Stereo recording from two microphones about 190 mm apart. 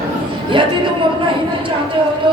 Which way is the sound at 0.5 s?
25° right (ahead or behind).